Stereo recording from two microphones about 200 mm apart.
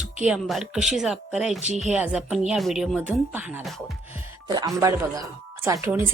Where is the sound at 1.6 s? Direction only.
35° right (ahead or behind).